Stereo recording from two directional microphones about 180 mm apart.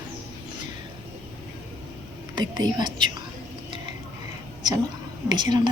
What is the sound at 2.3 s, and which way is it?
Speech, 25° right (ahead or behind).